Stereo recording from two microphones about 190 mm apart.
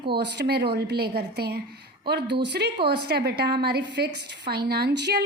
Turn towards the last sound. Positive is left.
turn(degrees=-60)  # may be behind; listen again after turning